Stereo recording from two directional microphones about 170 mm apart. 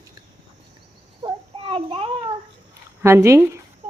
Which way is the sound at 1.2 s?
35° right (ahead or behind).